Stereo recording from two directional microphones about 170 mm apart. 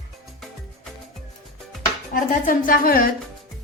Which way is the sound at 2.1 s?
55° left (ahead or behind).